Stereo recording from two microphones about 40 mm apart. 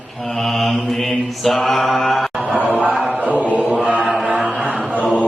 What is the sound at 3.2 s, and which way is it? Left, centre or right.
Chant, right.